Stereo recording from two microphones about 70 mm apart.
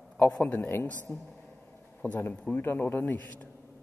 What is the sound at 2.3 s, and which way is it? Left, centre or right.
Speech, centre.